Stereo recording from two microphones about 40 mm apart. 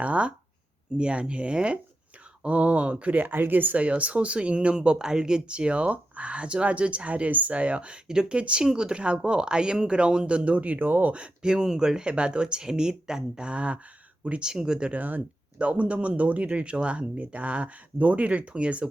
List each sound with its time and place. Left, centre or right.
0.0 s speech: right
3.2 s speech: right
3.8 s speech: right; by 8.4 s centre
8.4 s speech: right
10.8 s speech: right
11.1 s speech: right
14.5 s speech: centre
14.8 s speech: right
15.8 s speech: right